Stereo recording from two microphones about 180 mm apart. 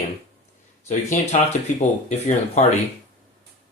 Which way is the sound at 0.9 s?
40° left (ahead or behind).